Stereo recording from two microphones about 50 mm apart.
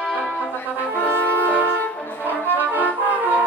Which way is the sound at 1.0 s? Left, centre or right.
Left.